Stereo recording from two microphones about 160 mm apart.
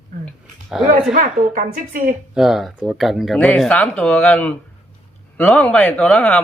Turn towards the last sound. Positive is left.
turn(degrees=5)  # may be behind; listen again after turning